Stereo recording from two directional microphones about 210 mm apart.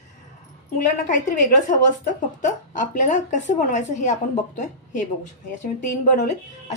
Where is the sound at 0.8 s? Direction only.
40° left (ahead or behind).